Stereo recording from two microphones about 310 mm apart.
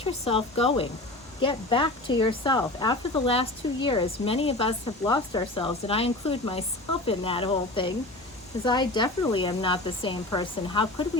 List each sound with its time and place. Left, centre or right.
0.0 s speech: centre